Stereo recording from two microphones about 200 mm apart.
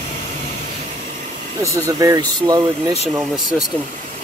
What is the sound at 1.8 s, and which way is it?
Speech, 15° right (ahead or behind).